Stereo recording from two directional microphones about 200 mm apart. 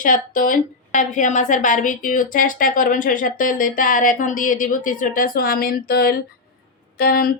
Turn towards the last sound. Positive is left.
turn(degrees=45)  # may be behind; listen again after turning